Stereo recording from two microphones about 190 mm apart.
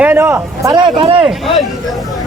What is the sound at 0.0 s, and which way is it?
Speech, 10° right (ahead or behind).